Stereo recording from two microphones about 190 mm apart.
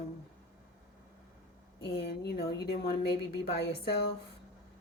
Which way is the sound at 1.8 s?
60° left (ahead or behind).